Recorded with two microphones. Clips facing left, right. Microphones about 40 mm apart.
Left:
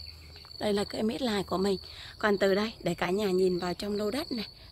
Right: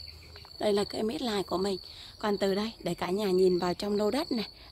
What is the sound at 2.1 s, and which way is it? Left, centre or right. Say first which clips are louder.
A woman's voice: left 3 dB; left.